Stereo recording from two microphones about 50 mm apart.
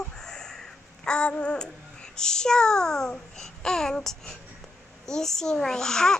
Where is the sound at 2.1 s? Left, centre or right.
Centre.